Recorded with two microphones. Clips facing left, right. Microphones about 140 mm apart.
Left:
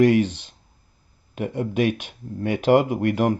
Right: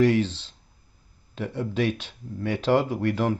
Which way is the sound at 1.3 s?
50° left (ahead or behind).